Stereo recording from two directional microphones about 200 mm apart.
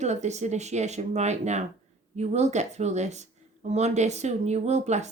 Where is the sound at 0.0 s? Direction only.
35° right (ahead or behind).